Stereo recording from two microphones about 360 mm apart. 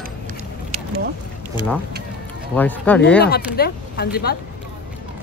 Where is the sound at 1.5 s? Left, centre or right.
Centre.